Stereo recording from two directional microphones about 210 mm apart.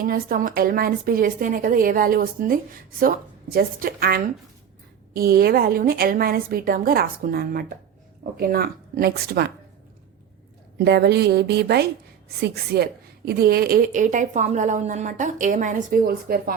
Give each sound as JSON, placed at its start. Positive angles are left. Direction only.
{"t": 0.0, "sound": "a woman's voice", "side_deg": -45}
{"t": 10.8, "sound": "a woman's voice", "side_deg": -50}